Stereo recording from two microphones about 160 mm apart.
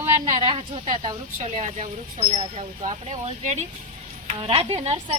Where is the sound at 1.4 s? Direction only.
45° right (ahead or behind).